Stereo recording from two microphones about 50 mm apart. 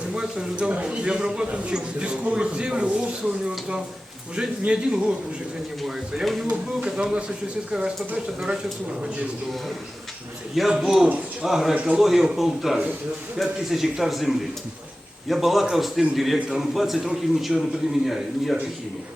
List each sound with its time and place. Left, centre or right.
0.1 s a man's voice: centre
6.5 s speech: centre
10.7 s a man's voice: centre